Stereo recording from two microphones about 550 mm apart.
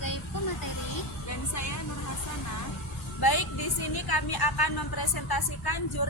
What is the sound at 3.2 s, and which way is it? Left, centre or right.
A woman's voice, left.